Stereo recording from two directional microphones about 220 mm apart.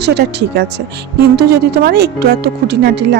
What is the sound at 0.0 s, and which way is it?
A woman's voice, 50° right (ahead or behind).